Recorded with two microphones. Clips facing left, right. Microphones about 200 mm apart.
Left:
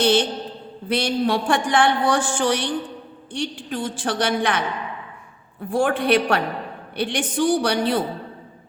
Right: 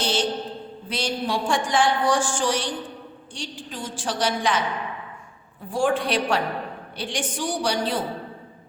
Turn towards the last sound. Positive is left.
turn(degrees=60)  # may be behind; listen again after turning